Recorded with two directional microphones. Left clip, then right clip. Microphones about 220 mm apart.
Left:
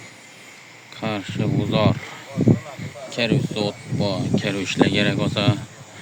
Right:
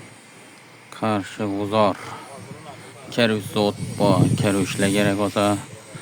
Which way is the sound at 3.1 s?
40° right (ahead or behind).